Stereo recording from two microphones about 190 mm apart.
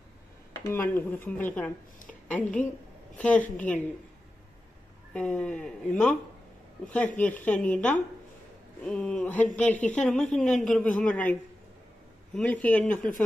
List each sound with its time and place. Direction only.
0.5 s a woman's voice: 15° left (ahead or behind)
5.1 s speech: 5° left (ahead or behind)
12.4 s speech: 10° left (ahead or behind)